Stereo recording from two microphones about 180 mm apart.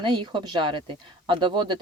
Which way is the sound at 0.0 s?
25° right (ahead or behind).